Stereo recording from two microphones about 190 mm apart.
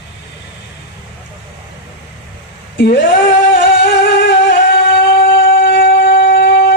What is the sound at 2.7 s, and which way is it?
Singing, 60° left (ahead or behind).